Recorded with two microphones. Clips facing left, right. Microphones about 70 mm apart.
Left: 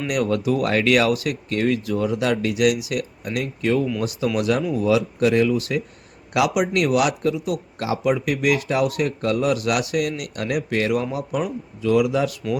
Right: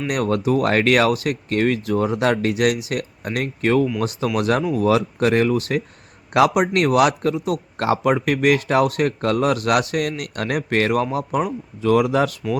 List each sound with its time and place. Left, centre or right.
0.1 s speech: right